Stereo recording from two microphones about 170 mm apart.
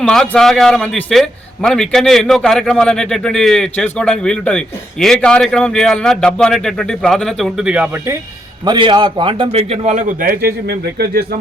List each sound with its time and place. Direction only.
0.0 s a man's voice: 5° left (ahead or behind)
8.6 s a man's voice: 25° right (ahead or behind); by 11.3 s 65° right (ahead or behind)